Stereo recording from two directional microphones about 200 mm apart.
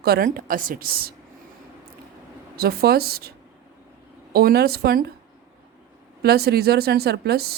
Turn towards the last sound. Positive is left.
turn(degrees=-50)  # may be behind; listen again after turning